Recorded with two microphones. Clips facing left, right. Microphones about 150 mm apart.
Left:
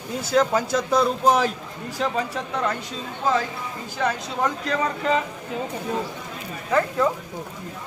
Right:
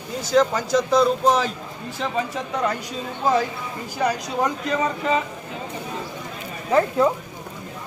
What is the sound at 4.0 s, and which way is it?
Speech, 15° right (ahead or behind).